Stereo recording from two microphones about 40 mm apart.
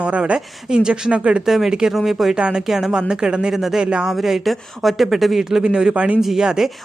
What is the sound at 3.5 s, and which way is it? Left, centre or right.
Speech, centre.